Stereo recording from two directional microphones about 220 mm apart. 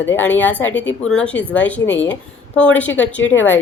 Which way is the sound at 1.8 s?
55° left (ahead or behind).